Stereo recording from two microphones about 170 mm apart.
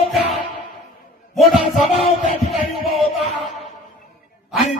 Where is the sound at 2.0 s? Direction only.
35° left (ahead or behind).